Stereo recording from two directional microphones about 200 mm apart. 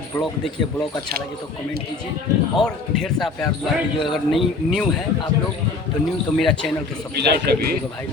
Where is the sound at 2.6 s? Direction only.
Centre (ahead or behind).